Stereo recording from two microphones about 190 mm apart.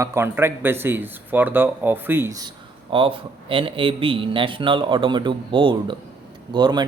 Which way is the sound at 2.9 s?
30° right (ahead or behind).